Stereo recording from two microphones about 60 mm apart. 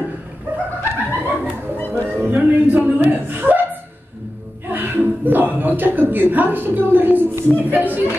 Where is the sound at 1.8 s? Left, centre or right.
Left.